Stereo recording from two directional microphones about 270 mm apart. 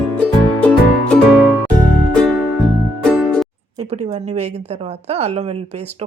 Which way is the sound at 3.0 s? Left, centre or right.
Centre.